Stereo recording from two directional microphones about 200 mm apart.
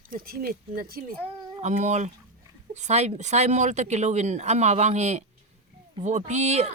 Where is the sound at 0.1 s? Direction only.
50° right (ahead or behind).